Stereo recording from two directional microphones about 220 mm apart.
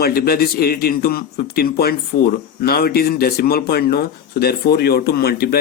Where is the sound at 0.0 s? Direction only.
45° left (ahead or behind).